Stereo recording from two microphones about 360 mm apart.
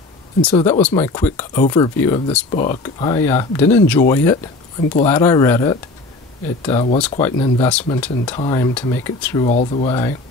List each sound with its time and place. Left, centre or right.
0.5 s speech: centre
9.5 s speech: centre